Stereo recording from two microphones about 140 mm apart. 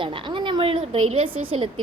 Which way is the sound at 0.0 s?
35° right (ahead or behind).